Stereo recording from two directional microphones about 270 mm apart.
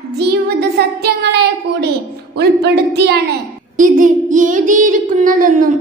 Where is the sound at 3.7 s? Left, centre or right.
Right.